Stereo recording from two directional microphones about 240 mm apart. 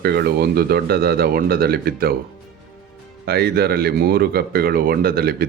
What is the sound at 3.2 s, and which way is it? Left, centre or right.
Speech, right.